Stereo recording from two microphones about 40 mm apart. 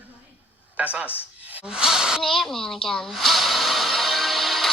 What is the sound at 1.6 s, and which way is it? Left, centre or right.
Speech, centre.